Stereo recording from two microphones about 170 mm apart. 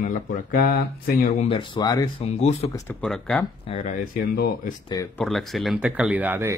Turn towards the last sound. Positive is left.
turn(degrees=-10)  # may be behind; listen again after turning